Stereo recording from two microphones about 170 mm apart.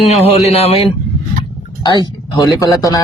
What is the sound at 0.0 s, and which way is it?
Speech, 40° left (ahead or behind).